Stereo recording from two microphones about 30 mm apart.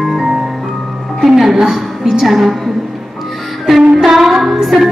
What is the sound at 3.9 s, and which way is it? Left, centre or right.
Music, centre.